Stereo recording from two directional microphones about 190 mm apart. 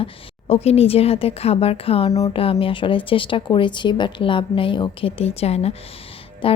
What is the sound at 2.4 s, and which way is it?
A woman's voice, 30° left (ahead or behind).